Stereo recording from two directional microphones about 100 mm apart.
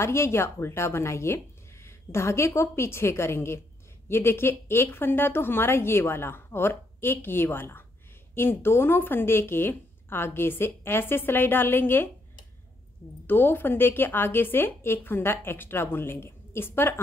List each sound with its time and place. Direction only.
0.0 s a woman's voice: 25° left (ahead or behind)
13.3 s a woman's voice: 20° left (ahead or behind)